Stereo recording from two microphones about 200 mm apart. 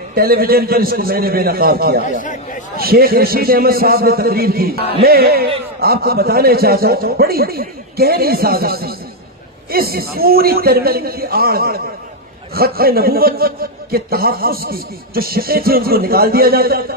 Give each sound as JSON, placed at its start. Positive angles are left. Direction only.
{"t": 0.1, "sound": "a man's voice", "side_deg": -50}